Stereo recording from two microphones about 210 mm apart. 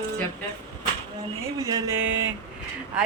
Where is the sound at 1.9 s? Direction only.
65° right (ahead or behind).